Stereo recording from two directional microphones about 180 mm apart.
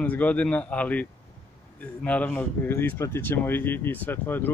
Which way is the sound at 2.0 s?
10° left (ahead or behind).